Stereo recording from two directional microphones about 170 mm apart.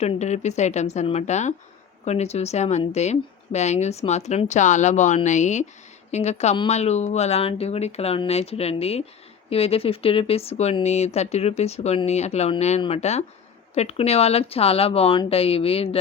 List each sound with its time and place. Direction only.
0.0 s speech: 40° left (ahead or behind)